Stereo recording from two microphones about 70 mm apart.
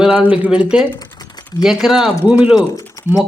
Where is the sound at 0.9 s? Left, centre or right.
Left.